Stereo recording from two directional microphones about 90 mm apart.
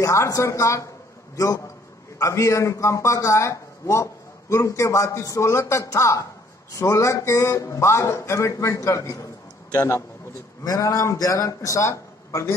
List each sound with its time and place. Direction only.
0.0 s a man's voice: 35° left (ahead or behind)
10.6 s a man's voice: 40° left (ahead or behind)